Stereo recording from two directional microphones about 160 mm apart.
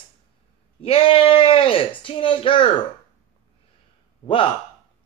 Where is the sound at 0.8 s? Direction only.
35° left (ahead or behind).